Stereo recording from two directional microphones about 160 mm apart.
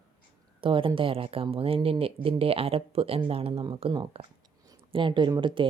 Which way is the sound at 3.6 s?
30° right (ahead or behind).